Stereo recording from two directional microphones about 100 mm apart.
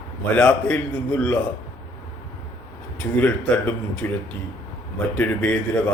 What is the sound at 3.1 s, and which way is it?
Speech, 15° left (ahead or behind).